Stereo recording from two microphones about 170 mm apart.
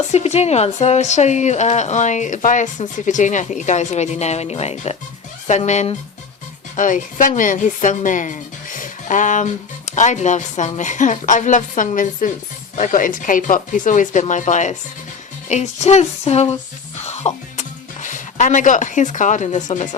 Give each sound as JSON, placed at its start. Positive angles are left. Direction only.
{"t": 0.1, "sound": "a woman's voice", "side_deg": 40}